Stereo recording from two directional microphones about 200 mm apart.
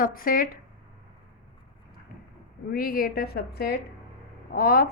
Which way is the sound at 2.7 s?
45° left (ahead or behind).